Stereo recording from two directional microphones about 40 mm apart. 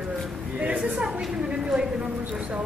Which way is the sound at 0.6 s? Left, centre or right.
Right.